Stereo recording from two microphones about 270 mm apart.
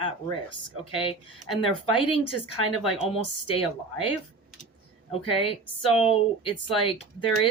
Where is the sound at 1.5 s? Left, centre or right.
Centre.